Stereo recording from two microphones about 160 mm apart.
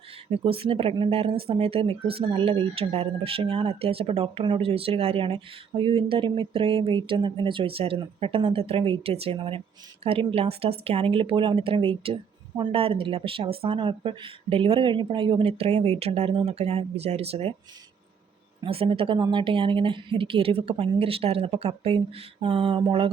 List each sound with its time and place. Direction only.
0.3 s speech: 35° right (ahead or behind)
18.6 s speech: 35° right (ahead or behind)